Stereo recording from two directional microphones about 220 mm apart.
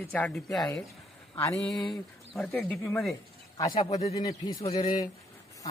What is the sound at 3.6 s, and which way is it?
Speech, 15° left (ahead or behind).